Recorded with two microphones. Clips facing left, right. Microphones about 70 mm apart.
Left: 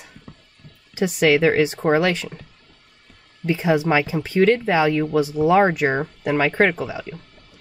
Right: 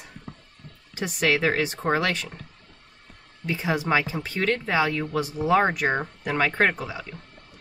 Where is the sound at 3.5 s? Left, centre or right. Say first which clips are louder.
Left 6 dB; left.